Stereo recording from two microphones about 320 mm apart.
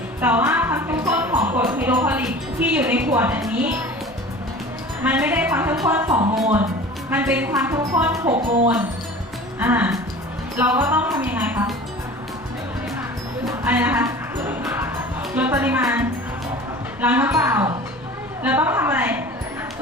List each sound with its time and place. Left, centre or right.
0.2 s music: centre
5.0 s speech: centre
6.1 s speech: centre
6.4 s speech: centre
13.4 s music: centre
17.0 s speech: centre